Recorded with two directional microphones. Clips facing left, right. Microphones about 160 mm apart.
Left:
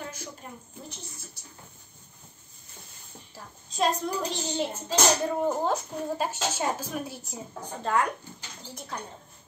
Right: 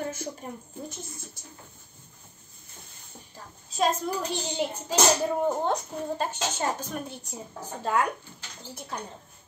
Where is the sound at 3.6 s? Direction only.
Centre (ahead or behind).